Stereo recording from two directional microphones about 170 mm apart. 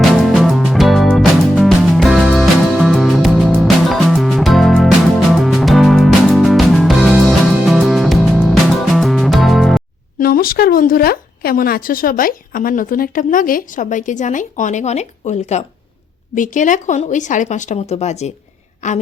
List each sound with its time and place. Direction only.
0.0 s music: centre (ahead or behind)
10.2 s speech: 60° left (ahead or behind)